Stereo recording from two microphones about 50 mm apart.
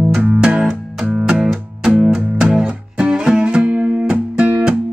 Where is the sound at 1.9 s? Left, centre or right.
Centre.